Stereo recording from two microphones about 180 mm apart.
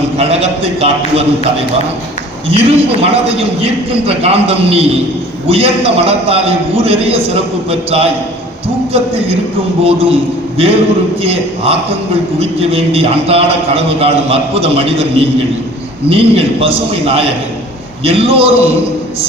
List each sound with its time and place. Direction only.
0.2 s a man's voice: 35° right (ahead or behind)
2.5 s a man's voice: 35° right (ahead or behind)
9.8 s a man's voice: 35° right (ahead or behind)